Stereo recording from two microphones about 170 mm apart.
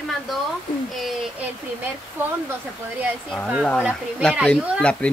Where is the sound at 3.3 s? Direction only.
Centre (ahead or behind).